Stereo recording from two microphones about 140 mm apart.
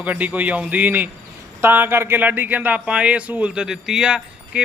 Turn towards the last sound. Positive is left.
turn(degrees=-5)  # may be behind; listen again after turning